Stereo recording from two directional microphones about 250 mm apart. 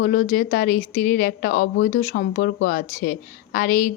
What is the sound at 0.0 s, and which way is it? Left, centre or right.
Speech, left.